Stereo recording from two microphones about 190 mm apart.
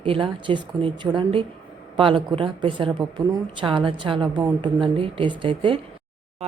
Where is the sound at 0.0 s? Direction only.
25° right (ahead or behind).